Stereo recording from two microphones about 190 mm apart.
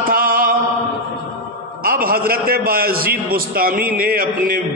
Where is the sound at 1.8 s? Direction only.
50° right (ahead or behind).